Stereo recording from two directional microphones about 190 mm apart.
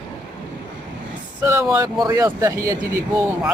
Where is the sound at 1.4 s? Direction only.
10° right (ahead or behind).